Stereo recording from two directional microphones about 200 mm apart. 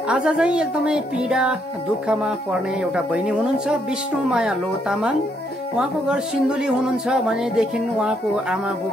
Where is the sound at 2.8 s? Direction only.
5° right (ahead or behind).